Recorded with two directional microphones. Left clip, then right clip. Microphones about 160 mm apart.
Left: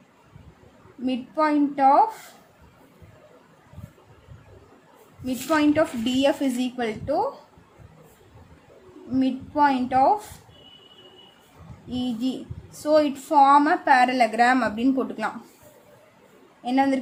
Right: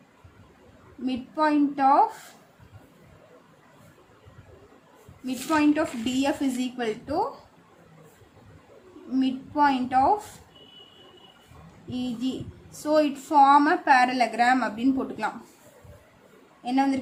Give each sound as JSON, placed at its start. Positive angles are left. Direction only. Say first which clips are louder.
{"t": 1.0, "sound": "a child's voice", "louder": "left 2 dB", "side_deg": 25}
{"t": 5.2, "sound": "a child's voice", "louder": "left 2 dB", "side_deg": 30}
{"t": 9.1, "sound": "a child's voice", "louder": "left 2 dB", "side_deg": 25}
{"t": 11.9, "sound": "a woman's voice", "louder": "left 3 dB", "side_deg": 30}
{"t": 16.6, "sound": "a woman's voice", "louder": "left 3 dB", "side_deg": 30}